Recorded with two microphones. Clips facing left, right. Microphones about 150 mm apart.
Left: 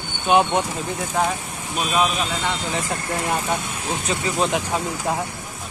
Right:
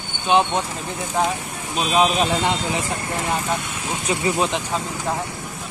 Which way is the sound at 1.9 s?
35° right (ahead or behind).